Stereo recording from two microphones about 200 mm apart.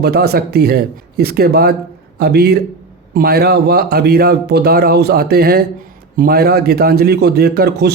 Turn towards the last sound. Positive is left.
turn(degrees=-55)  # may be behind; listen again after turning